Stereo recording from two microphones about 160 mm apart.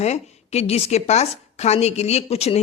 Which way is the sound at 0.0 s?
45° left (ahead or behind).